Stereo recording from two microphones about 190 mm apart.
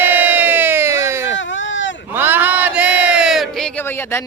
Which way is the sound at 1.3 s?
80° left.